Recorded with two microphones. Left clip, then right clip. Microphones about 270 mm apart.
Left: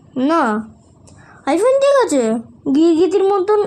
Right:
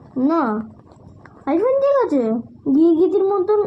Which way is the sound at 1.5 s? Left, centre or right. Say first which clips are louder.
Left 4 dB; left.